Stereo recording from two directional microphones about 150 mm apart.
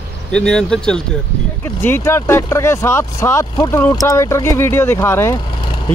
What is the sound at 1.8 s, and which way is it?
Speech, 15° left (ahead or behind).